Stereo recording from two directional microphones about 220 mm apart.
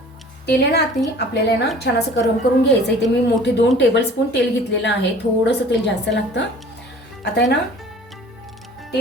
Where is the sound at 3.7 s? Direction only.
50° left (ahead or behind).